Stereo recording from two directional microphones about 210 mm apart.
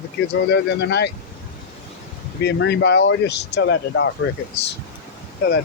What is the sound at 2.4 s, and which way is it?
Speech, 55° left (ahead or behind).